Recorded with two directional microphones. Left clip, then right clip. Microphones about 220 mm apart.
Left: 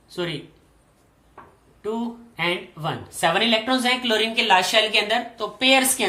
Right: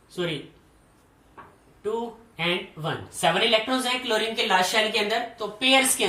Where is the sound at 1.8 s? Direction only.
25° left (ahead or behind).